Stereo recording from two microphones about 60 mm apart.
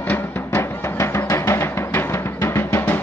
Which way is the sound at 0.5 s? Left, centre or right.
Left.